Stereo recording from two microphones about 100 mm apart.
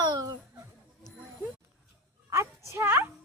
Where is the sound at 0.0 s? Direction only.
40° right (ahead or behind).